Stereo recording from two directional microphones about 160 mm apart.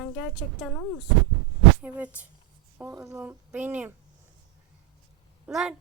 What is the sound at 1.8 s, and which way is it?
A woman's voice, 10° right (ahead or behind).